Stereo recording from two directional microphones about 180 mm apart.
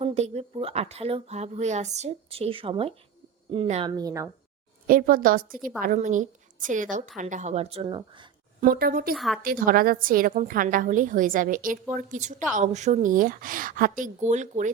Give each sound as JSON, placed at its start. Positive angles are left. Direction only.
{"t": 0.0, "sound": "speech", "side_deg": -35}
{"t": 3.9, "sound": "speech", "side_deg": -20}
{"t": 4.9, "sound": "a woman's voice", "side_deg": -50}
{"t": 8.6, "sound": "a woman's voice", "side_deg": -50}
{"t": 9.1, "sound": "a woman's voice", "side_deg": 0}
{"t": 9.4, "sound": "a woman's voice", "side_deg": -50}